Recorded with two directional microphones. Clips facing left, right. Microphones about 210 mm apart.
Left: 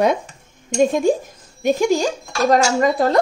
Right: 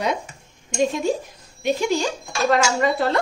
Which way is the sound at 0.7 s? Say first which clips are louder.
Left 5 dB; 50° left (ahead or behind).